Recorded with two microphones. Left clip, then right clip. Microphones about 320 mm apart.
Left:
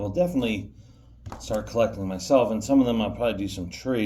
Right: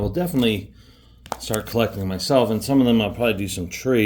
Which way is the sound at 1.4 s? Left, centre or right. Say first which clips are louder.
Right 1 dB; right.